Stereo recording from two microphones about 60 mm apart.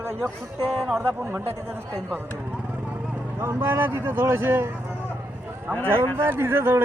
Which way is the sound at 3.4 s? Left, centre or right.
Right.